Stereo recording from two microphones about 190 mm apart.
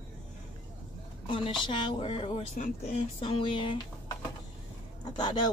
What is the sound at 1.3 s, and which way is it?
Speech, 25° left (ahead or behind).